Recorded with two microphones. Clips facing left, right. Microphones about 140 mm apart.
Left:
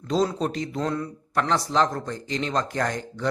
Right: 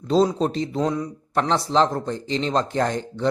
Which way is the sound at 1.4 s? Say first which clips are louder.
Right 3 dB; 30° right (ahead or behind).